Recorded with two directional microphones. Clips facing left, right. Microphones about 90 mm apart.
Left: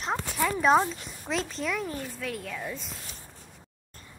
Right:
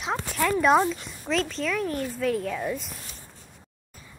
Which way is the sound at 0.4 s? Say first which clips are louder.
Right 2 dB; 10° left (ahead or behind).